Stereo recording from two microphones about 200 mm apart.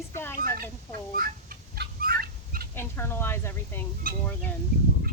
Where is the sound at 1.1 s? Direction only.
45° right (ahead or behind).